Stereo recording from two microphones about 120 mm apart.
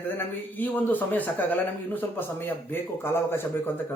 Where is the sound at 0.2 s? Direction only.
15° left (ahead or behind).